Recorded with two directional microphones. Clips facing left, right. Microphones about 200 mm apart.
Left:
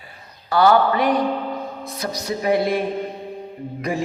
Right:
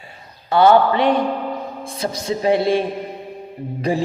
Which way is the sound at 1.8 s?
25° right (ahead or behind).